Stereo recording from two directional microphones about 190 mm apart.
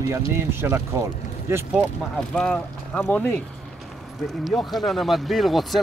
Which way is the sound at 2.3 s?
5° left (ahead or behind).